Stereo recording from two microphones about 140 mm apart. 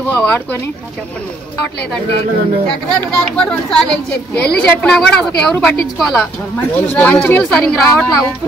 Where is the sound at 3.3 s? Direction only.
5° left (ahead or behind).